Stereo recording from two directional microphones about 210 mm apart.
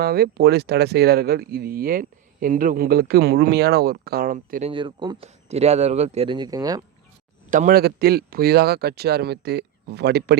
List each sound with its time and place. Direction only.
0.0 s speech: 50° right (ahead or behind)
4.7 s speech: 25° right (ahead or behind)
7.5 s speech: 40° right (ahead or behind)